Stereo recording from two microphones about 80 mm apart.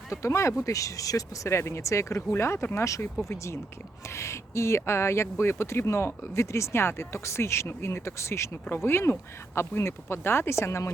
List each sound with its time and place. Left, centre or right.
0.1 s speech: left